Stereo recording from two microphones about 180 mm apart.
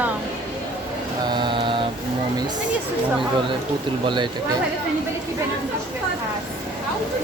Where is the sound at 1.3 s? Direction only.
25° right (ahead or behind).